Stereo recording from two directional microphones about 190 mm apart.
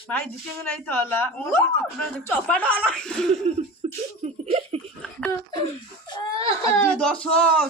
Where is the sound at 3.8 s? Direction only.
30° right (ahead or behind).